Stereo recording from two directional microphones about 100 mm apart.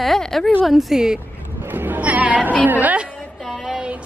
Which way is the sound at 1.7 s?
20° right (ahead or behind).